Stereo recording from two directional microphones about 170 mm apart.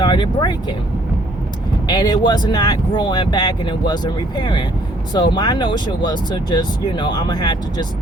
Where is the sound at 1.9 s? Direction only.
25° left (ahead or behind).